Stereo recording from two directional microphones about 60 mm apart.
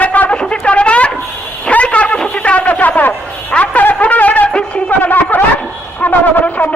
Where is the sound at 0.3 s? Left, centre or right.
Centre.